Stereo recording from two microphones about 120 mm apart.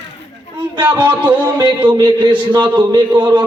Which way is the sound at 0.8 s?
40° right (ahead or behind).